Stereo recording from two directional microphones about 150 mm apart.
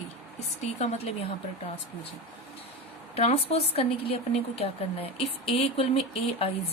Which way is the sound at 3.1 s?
45° left (ahead or behind).